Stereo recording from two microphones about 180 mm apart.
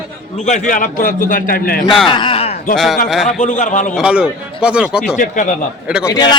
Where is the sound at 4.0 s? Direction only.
5° right (ahead or behind).